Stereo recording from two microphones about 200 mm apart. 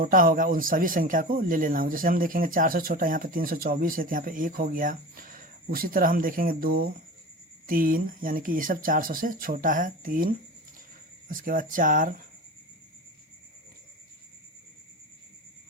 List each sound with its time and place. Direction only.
0.0 s speech: 45° right (ahead or behind)